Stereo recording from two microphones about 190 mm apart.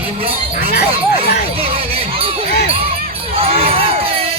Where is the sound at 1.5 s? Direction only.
30° right (ahead or behind).